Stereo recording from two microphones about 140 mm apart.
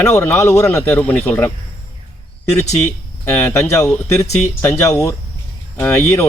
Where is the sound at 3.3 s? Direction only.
15° left (ahead or behind).